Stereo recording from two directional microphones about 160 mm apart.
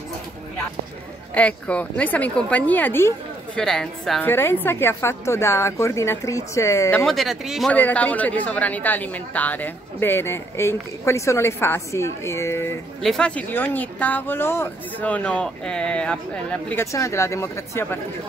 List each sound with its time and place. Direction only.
1.3 s speech: 10° left (ahead or behind)
3.6 s a woman's voice: 5° left (ahead or behind)
4.3 s speech: 15° left (ahead or behind)
7.1 s a woman's voice: centre (ahead or behind)
7.7 s speech: 10° left (ahead or behind)
13.0 s speech: 5° left (ahead or behind)
16.8 s speech: 20° left (ahead or behind)